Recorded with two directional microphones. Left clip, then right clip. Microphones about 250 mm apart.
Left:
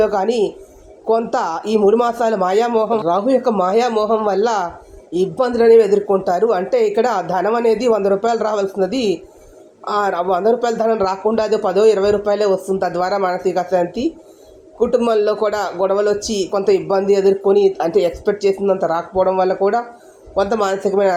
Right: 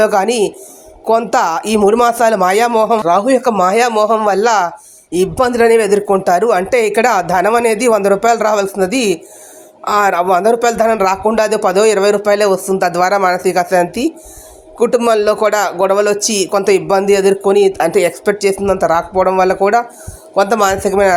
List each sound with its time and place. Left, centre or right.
0.0 s speech: right